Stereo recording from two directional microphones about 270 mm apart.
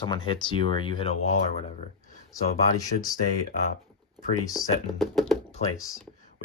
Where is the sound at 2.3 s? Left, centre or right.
Centre.